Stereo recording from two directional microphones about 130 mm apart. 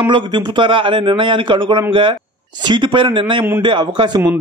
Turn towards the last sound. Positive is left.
turn(degrees=-35)  # may be behind; listen again after turning